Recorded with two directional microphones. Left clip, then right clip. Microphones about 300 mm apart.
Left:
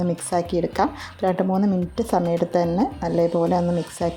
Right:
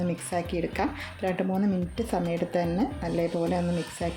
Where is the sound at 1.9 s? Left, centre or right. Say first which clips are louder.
Left 8 dB; centre.